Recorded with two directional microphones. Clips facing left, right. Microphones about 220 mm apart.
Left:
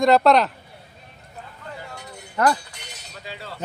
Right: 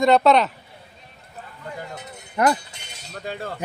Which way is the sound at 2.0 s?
20° right (ahead or behind).